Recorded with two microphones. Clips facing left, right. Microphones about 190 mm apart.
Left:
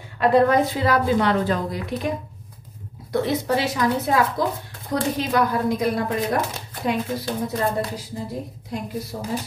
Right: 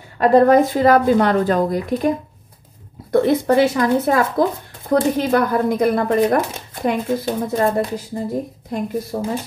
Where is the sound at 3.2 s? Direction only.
55° right (ahead or behind).